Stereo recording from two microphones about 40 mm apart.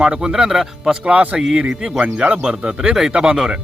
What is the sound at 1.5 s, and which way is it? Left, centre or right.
Speech, right.